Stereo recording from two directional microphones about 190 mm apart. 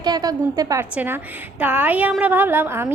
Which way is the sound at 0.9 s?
10° right (ahead or behind).